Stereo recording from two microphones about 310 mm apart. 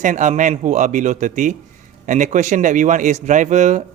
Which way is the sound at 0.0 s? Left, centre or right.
Right.